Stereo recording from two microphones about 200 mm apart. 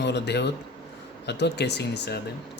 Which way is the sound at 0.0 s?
60° left (ahead or behind).